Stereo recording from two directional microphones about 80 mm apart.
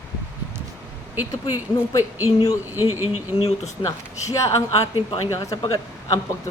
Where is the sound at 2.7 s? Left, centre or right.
Right.